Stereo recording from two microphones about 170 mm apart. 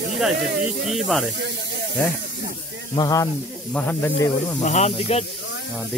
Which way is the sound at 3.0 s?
20° left (ahead or behind).